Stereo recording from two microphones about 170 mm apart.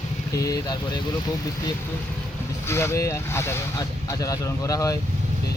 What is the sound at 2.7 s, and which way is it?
Speech, 15° left (ahead or behind).